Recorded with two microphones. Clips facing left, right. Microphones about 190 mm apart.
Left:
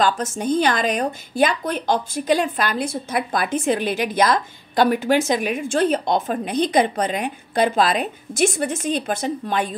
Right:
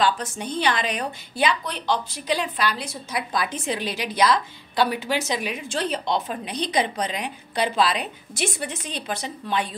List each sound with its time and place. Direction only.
0.0 s a woman's voice: 45° left (ahead or behind)